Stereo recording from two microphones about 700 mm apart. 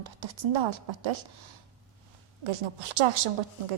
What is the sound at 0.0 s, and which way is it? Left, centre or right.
Speech, right.